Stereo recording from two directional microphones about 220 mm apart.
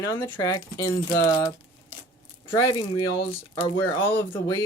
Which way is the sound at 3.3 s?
20° left (ahead or behind).